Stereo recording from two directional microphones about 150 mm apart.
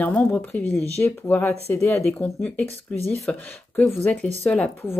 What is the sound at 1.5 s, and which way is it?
Speech, 5° left (ahead or behind).